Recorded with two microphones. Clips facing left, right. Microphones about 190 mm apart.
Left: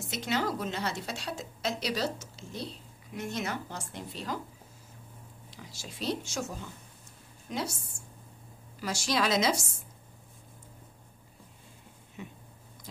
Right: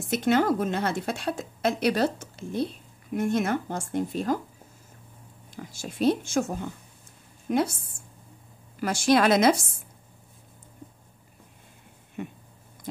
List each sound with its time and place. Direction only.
0.1 s a woman's voice: 55° right (ahead or behind)
5.5 s a woman's voice: 50° right (ahead or behind)
8.8 s a woman's voice: 55° right (ahead or behind)
12.2 s speech: 55° right (ahead or behind)